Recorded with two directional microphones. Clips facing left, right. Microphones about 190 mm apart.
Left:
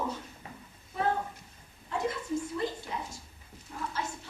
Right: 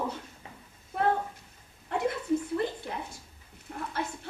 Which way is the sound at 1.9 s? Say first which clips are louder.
Right 4 dB; 65° right (ahead or behind).